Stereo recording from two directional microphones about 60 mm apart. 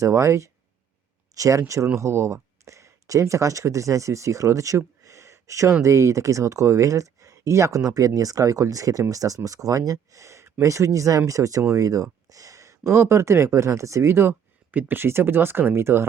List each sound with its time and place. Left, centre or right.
0.0 s speech: right
5.0 s a sound: right
5.8 s speech: right
14.7 s speech: right